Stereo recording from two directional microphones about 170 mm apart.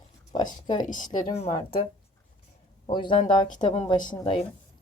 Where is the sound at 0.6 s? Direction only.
50° left (ahead or behind).